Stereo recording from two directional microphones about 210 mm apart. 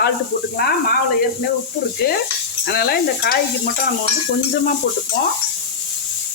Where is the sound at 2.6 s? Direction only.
45° left (ahead or behind).